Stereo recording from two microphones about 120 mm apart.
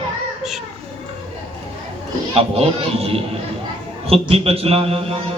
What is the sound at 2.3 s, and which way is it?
Speech, 55° right (ahead or behind).